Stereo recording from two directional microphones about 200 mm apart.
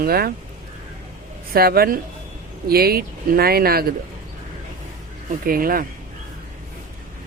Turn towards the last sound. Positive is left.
turn(degrees=-45)  # may be behind; listen again after turning